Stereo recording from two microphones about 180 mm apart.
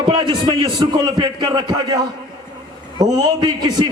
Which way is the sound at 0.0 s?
25° right (ahead or behind).